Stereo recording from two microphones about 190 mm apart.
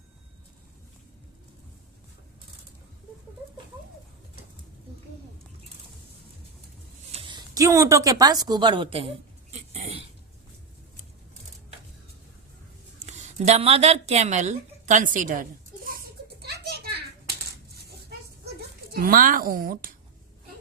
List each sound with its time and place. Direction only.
7.1 s speech: 25° right (ahead or behind)
9.5 s a sound: 35° right (ahead or behind)
13.1 s speech: 35° right (ahead or behind)
16.4 s children playing: 60° right (ahead or behind)
18.9 s a woman's voice: 50° right (ahead or behind)